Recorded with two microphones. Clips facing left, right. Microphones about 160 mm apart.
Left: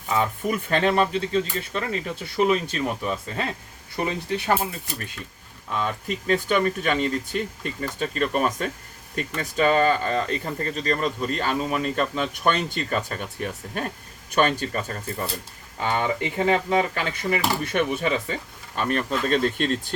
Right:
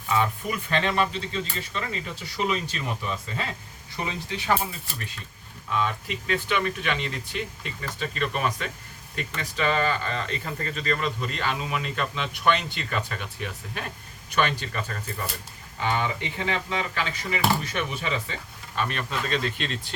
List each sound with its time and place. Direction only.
0.7 s speech: 45° left (ahead or behind)
5.8 s speech: 40° left (ahead or behind)